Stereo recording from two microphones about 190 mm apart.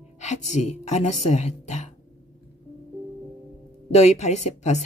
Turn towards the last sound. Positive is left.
turn(degrees=35)  # may be behind; listen again after turning